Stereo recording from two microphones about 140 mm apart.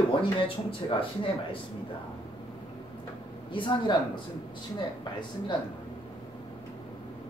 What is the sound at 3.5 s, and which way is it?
Speech, 35° left (ahead or behind).